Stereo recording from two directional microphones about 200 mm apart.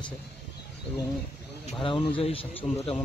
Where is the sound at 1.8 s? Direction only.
25° left (ahead or behind).